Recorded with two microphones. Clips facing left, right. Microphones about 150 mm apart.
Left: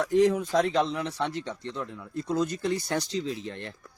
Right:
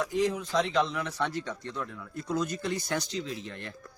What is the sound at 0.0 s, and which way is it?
Speech, 60° left (ahead or behind).